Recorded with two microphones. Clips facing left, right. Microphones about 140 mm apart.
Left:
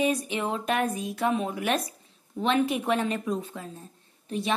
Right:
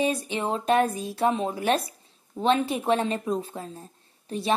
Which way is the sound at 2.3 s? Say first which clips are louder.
Right 1 dB; 30° right (ahead or behind).